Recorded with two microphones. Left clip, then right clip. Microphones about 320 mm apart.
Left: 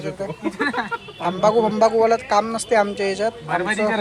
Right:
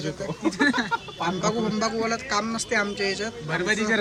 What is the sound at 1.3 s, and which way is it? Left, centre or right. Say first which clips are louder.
Speech: left 9 dB; centre.